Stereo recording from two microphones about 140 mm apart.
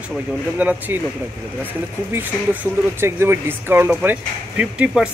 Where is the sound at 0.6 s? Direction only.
10° right (ahead or behind).